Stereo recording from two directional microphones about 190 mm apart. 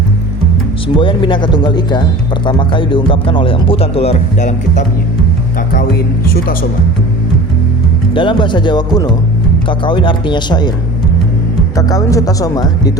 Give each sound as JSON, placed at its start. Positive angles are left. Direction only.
{"t": 0.9, "sound": "speech", "side_deg": 25}
{"t": 6.2, "sound": "speech", "side_deg": 50}
{"t": 8.1, "sound": "speech", "side_deg": 25}
{"t": 11.8, "sound": "speech", "side_deg": 20}